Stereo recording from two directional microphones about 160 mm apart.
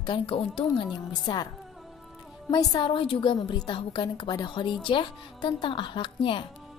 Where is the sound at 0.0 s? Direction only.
30° left (ahead or behind).